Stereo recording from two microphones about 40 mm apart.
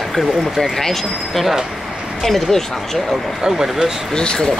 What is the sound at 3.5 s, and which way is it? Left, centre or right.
Speech, centre.